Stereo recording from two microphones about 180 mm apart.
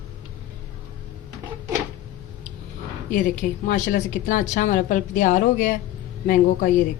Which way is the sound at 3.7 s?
45° left (ahead or behind).